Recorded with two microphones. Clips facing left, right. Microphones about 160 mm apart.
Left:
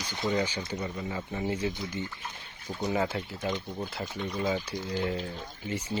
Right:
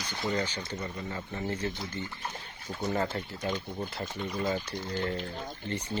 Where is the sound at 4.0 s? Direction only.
Centre (ahead or behind).